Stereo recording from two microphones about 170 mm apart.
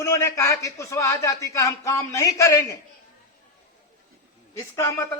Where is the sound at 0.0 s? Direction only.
15° left (ahead or behind).